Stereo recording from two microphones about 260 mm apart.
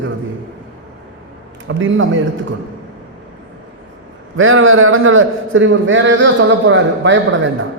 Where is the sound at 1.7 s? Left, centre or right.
Right.